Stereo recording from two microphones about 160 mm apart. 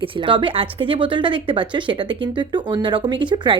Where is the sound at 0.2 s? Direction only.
30° right (ahead or behind).